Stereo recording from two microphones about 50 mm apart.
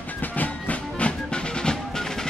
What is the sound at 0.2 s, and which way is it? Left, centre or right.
Music, left.